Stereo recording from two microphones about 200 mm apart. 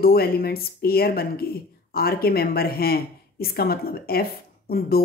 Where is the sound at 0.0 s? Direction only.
50° left (ahead or behind).